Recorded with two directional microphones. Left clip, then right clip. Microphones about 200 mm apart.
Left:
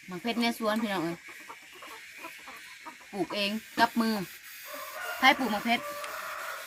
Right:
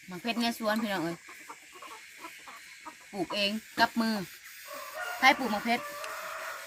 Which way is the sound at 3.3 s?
5° right (ahead or behind).